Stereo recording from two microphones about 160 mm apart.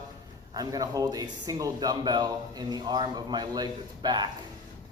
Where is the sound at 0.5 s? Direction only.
25° right (ahead or behind).